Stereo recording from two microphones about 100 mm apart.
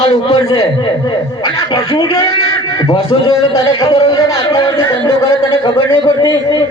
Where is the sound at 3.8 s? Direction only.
35° left (ahead or behind).